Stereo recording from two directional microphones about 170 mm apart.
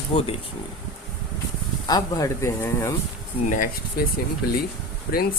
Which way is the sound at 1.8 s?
20° left (ahead or behind).